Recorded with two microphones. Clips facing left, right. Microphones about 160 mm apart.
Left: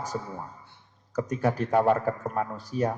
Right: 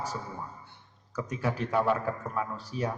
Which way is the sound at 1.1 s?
45° left (ahead or behind).